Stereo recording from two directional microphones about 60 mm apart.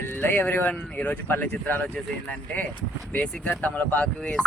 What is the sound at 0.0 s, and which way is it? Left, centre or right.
Speech, left.